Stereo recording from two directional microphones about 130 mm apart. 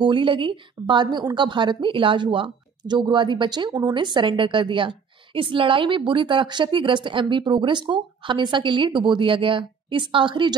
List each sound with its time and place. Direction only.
0.0 s a woman's voice: 40° right (ahead or behind)